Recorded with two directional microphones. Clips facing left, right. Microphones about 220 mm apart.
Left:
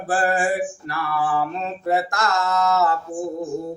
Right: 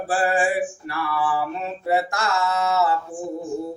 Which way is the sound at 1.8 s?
10° right (ahead or behind).